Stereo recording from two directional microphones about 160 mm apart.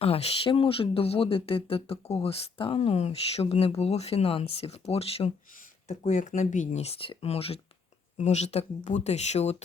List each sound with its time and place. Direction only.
0.0 s speech: 40° left (ahead or behind)